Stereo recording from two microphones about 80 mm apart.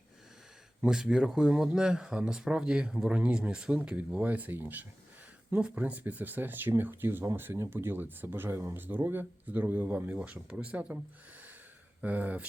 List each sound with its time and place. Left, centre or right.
0.8 s speech: centre
12.0 s speech: centre